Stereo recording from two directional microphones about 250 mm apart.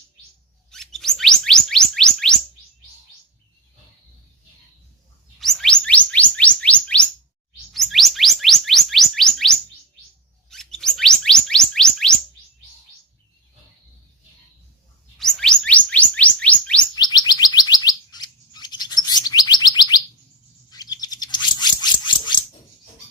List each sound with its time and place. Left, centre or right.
0.7 s chirp tone: centre
5.4 s chirp tone: centre
15.2 s chirp tone: centre
16.9 s bird: centre